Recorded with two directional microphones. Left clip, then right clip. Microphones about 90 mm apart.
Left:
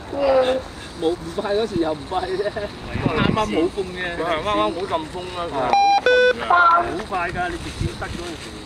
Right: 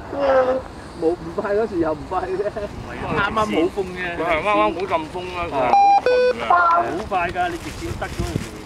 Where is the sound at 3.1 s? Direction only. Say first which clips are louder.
Right 2 dB; 35° right (ahead or behind).